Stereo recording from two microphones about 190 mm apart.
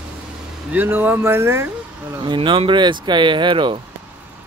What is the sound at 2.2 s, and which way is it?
Speech, 25° right (ahead or behind).